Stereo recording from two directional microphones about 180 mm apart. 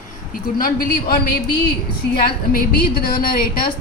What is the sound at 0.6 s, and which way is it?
A woman's voice, 55° left (ahead or behind).